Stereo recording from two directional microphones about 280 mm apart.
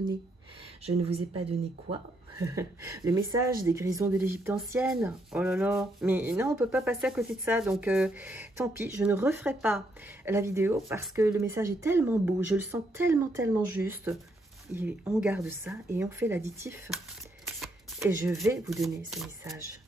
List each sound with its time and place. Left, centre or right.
0.8 s speech: right
17.6 s shuffling cards: centre
18.7 s speech: centre